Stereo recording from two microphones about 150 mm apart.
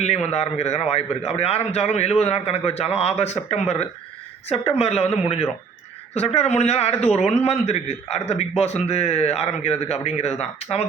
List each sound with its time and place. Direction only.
0.0 s a man's voice: 45° left (ahead or behind)